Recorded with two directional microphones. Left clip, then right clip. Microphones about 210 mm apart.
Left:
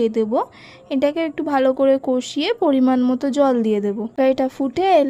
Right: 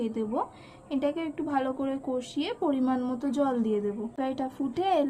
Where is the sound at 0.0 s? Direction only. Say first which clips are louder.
Left 12 dB; 40° left (ahead or behind).